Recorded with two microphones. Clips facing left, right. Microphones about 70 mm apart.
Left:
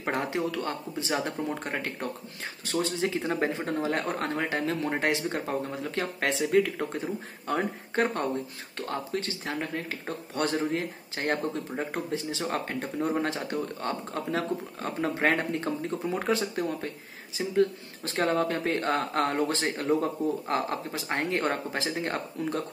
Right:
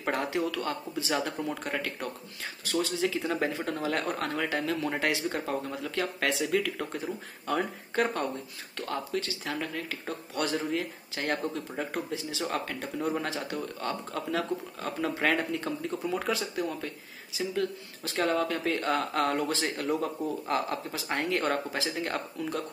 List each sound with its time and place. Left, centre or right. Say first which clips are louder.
0.0 s speech: even; left